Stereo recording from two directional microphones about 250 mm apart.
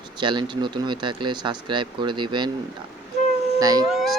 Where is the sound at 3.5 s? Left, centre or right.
Centre.